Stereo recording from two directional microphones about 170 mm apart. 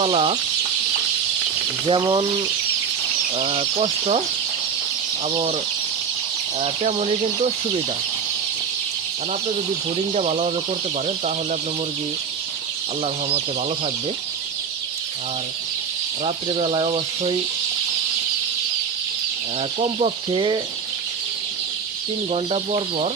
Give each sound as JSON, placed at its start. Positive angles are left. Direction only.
{"t": 0.0, "sound": "speech", "side_deg": -35}
{"t": 1.9, "sound": "speech", "side_deg": -30}
{"t": 3.3, "sound": "speech", "side_deg": -35}
{"t": 6.6, "sound": "speech", "side_deg": -40}
{"t": 10.2, "sound": "speech", "side_deg": -40}
{"t": 16.2, "sound": "speech", "side_deg": -35}
{"t": 19.8, "sound": "speech", "side_deg": -35}
{"t": 22.3, "sound": "speech", "side_deg": -35}